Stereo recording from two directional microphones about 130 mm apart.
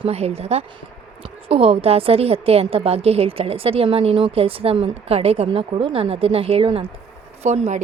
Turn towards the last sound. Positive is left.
turn(degrees=-65)  # may be behind; listen again after turning